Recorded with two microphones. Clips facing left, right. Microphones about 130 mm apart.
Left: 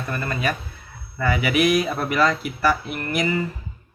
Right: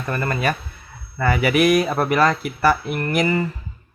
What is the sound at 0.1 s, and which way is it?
Speech, 50° right (ahead or behind).